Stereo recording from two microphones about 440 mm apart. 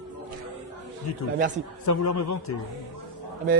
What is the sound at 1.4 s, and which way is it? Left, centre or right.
Speech, centre.